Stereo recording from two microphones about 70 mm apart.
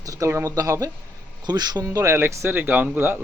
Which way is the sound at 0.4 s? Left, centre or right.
Right.